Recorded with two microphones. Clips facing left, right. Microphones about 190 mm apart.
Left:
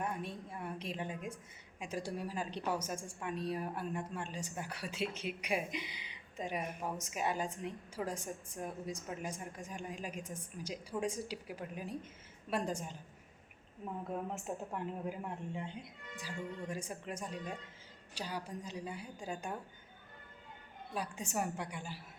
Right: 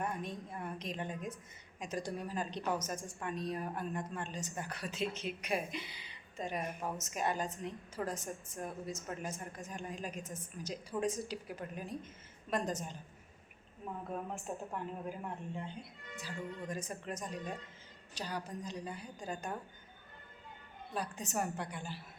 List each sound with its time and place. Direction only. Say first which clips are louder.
0.0 s a woman's voice: right 1 dB; 5° left (ahead or behind)
14.1 s a woman's voice: left 1 dB; 20° left (ahead or behind)
16.1 s a woman's voice: even; 10° left (ahead or behind)
20.9 s a woman's voice: even; 10° left (ahead or behind)